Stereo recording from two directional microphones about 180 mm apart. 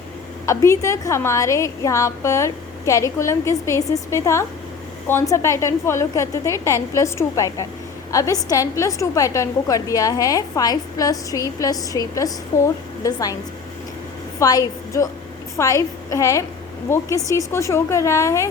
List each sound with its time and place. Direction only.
0.4 s a woman's voice: 15° left (ahead or behind)
14.3 s a woman's voice: 20° left (ahead or behind)